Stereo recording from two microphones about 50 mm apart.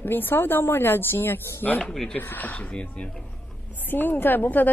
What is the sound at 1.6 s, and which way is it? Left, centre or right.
A woman's voice, left.